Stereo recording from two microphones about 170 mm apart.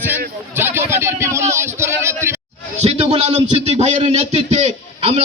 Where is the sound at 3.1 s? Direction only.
40° right (ahead or behind).